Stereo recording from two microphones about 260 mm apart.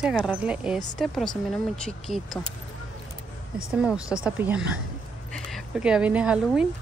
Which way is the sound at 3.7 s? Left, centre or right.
Centre.